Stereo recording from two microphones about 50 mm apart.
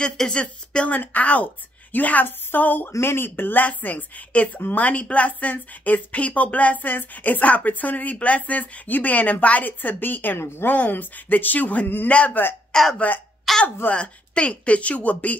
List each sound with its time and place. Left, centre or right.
0.0 s speech: centre
0.8 s speech: left
3.6 s speech: left
4.6 s speech: left
4.8 s speech: left
10.7 s speech: left
12.7 s speech: centre
13.5 s a sound: centre
13.9 s speech: centre